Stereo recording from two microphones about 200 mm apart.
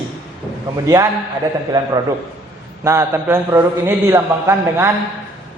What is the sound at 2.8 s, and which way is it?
A man's voice, 15° right (ahead or behind).